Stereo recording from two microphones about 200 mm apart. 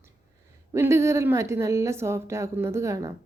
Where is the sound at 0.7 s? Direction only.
15° right (ahead or behind).